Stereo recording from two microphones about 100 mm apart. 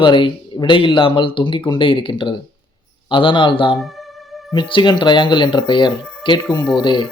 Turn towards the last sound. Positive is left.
turn(degrees=50)  # may be behind; listen again after turning